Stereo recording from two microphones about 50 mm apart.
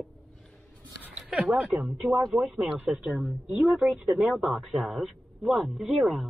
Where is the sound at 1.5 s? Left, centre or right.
Centre.